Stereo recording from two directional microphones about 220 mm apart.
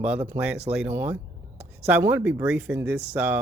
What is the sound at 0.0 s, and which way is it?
Speech, 10° right (ahead or behind).